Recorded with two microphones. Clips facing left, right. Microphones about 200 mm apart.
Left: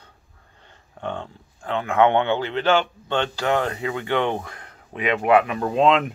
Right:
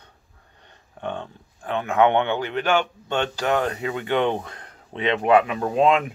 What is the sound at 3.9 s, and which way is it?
Speech, 20° right (ahead or behind).